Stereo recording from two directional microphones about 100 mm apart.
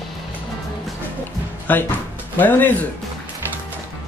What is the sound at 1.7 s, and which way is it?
Speech, 15° left (ahead or behind).